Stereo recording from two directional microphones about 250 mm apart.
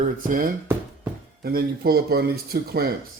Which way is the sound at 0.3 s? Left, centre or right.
Right.